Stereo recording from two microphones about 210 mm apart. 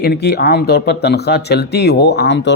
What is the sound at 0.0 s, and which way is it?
Speech, 50° left (ahead or behind).